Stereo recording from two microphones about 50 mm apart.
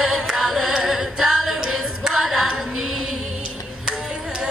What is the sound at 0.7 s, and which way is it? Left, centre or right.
A capella, centre.